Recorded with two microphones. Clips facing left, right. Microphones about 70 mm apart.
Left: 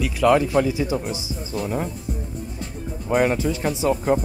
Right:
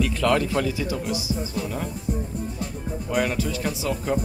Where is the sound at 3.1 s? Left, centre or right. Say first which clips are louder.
Left 5 dB; left.